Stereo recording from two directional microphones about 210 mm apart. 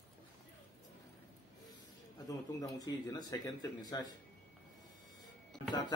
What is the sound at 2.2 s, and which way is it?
Speech, 15° left (ahead or behind).